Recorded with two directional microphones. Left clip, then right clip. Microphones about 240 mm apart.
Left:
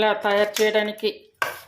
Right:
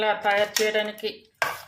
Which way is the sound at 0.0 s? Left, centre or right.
Left.